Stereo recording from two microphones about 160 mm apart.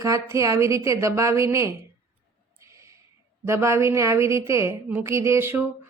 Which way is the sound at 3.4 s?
15° right (ahead or behind).